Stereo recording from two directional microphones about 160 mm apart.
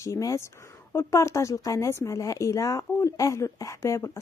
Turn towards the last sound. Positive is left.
turn(degrees=20)  # may be behind; listen again after turning